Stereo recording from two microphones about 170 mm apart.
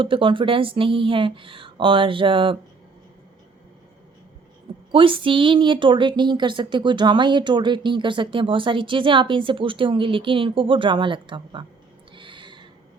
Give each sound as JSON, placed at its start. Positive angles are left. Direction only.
{"t": 0.0, "sound": "speech", "side_deg": -30}
{"t": 4.9, "sound": "speech", "side_deg": -30}
{"t": 12.1, "sound": "a sound", "side_deg": -30}